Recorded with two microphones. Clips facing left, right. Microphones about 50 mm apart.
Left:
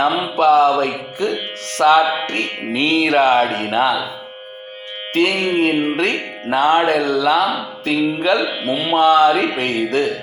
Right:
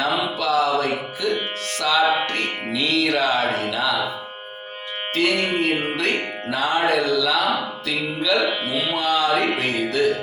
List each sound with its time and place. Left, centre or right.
0.0 s music: left
3.0 s music: left
5.1 s music: left